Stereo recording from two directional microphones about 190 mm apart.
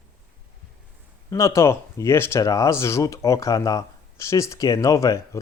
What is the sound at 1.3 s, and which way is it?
Speech, 15° left (ahead or behind).